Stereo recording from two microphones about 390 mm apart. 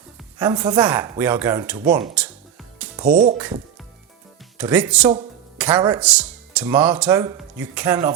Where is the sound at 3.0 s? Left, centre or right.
Right.